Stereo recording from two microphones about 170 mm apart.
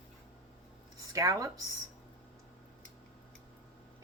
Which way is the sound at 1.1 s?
20° right (ahead or behind).